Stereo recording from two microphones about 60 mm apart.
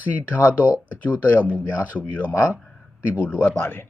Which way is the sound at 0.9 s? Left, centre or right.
Left.